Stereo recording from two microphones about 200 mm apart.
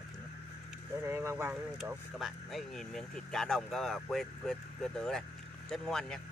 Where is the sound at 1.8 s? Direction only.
Centre (ahead or behind).